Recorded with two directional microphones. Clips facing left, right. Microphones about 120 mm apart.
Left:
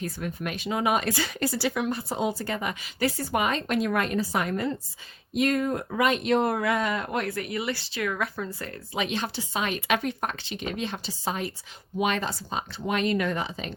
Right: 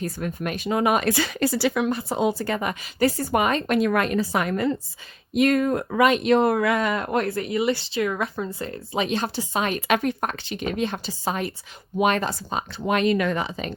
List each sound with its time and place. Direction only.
0.0 s speech: 45° right (ahead or behind)
7.3 s speech: 30° right (ahead or behind); by 13.7 s 60° right (ahead or behind)